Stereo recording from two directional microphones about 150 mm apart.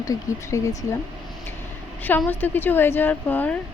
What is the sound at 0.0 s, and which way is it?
Speech, 20° left (ahead or behind).